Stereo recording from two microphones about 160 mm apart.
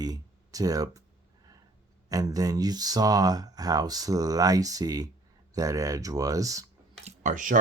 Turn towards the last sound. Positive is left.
turn(degrees=-55)  # may be behind; listen again after turning